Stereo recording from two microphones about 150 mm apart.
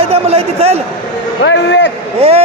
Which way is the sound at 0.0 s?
40° right (ahead or behind).